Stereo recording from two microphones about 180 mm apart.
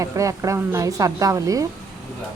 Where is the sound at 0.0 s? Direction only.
15° right (ahead or behind).